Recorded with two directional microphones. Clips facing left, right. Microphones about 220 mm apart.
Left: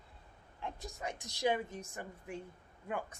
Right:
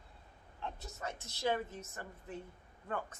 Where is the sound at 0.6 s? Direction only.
15° left (ahead or behind).